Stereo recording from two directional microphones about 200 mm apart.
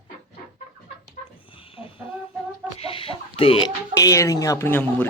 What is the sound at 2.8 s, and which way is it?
A man's voice, 25° left (ahead or behind).